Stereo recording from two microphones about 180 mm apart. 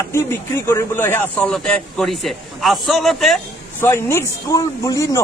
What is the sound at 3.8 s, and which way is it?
A man's voice, 15° left (ahead or behind).